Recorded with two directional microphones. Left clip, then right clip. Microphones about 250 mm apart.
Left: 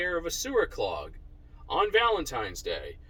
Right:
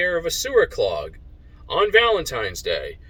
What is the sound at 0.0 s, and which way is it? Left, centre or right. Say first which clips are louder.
Speech: right 8 dB; centre.